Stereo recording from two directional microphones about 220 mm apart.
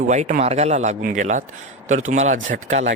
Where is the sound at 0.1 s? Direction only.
35° right (ahead or behind).